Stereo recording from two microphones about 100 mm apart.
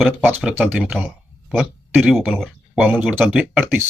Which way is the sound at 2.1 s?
5° right (ahead or behind).